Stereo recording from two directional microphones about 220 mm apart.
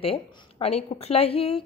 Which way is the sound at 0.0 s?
25° left (ahead or behind).